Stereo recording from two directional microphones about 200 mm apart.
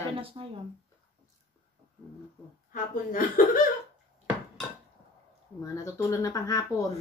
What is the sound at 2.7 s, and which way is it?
Speech, 45° left (ahead or behind).